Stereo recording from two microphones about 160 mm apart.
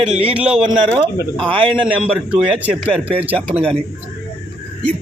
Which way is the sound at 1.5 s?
35° right (ahead or behind).